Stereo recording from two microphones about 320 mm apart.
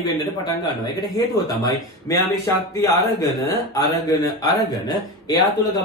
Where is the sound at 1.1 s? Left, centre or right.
Centre.